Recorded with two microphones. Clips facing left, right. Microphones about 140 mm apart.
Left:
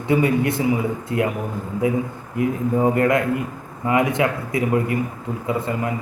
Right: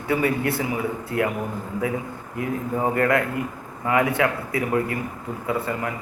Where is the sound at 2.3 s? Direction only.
20° left (ahead or behind).